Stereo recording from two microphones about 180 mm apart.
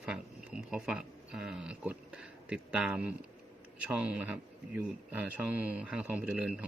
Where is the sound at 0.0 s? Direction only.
5° right (ahead or behind).